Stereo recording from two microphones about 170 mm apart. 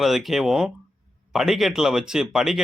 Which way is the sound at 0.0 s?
Centre (ahead or behind).